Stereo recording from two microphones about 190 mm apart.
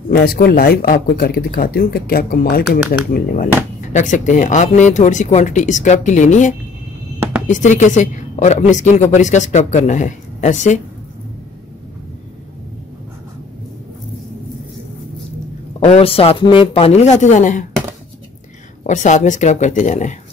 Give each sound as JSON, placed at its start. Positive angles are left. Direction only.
{"t": 0.1, "sound": "a woman's voice", "side_deg": 50}
{"t": 15.8, "sound": "a woman's voice", "side_deg": 35}
{"t": 18.9, "sound": "a woman's voice", "side_deg": 40}